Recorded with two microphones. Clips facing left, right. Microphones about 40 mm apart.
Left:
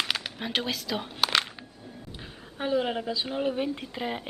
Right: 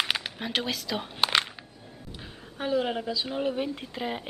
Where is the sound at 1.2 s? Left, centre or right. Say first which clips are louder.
Right 1 dB; centre.